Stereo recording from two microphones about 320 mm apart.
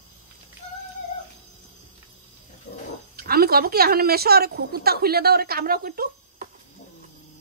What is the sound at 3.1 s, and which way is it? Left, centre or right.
A woman's voice, right.